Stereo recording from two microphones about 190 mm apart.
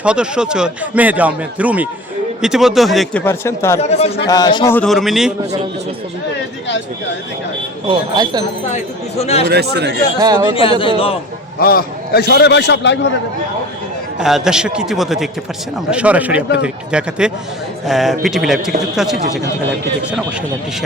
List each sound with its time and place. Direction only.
0.0 s a man's voice: 5° right (ahead or behind); by 3.8 s 15° left (ahead or behind)
3.8 s speech: 35° left (ahead or behind)
4.3 s speech: 20° left (ahead or behind)
4.7 s a man's voice: 5° left (ahead or behind)
7.9 s speech: 20° right (ahead or behind)
8.6 s speech: 35° left (ahead or behind)
9.5 s speech: 60° right (ahead or behind)
10.2 s speech: 20° right (ahead or behind)
10.5 s speech: 30° left (ahead or behind)
11.6 s a man's voice: 50° left (ahead or behind); by 13.1 s 70° left (ahead or behind)
14.2 s a man's voice: 5° right (ahead or behind)